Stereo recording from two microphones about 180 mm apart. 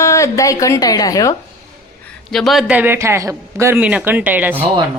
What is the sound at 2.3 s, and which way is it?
A man's voice, centre (ahead or behind).